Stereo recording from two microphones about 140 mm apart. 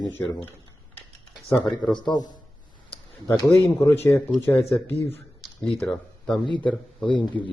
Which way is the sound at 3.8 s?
15° left (ahead or behind).